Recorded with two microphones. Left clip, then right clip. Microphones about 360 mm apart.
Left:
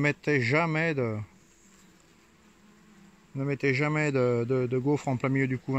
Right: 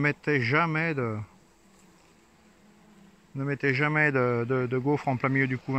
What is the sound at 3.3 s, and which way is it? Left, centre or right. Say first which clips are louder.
Speech: even; centre.